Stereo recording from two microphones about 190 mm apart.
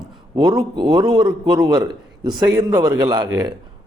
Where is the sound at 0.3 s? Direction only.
20° right (ahead or behind).